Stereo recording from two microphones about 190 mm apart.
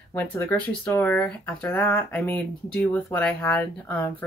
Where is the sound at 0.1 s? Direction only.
10° left (ahead or behind).